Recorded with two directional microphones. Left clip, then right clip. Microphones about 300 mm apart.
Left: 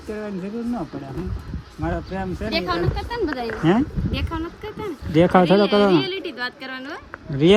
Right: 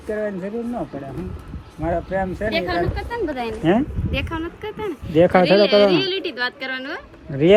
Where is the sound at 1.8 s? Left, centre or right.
Centre.